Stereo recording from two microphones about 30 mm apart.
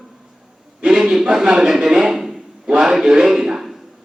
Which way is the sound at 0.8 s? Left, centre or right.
Right.